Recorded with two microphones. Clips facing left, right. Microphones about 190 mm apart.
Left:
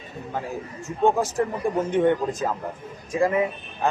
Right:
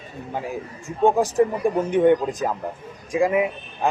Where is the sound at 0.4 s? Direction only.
15° right (ahead or behind).